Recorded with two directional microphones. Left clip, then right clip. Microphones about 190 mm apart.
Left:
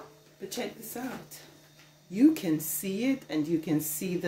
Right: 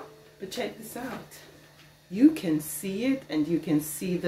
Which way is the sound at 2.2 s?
30° left (ahead or behind).